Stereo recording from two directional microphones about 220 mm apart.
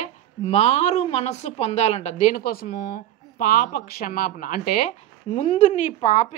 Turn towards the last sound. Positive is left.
turn(degrees=30)  # may be behind; listen again after turning